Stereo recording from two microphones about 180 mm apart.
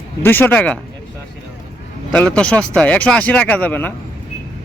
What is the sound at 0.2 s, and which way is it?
Speech, 10° left (ahead or behind).